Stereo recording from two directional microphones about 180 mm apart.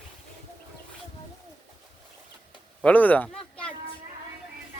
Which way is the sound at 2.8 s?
10° left (ahead or behind).